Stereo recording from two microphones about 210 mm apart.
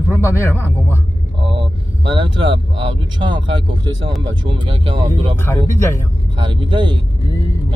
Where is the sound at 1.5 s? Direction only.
25° right (ahead or behind).